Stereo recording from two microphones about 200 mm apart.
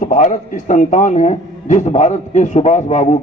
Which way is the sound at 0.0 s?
40° left (ahead or behind).